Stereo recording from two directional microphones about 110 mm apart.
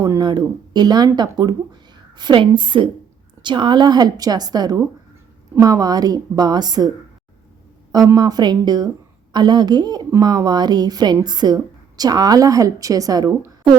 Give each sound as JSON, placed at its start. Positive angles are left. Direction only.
{"t": 0.0, "sound": "a woman's voice", "side_deg": -35}
{"t": 7.9, "sound": "a woman's voice", "side_deg": -35}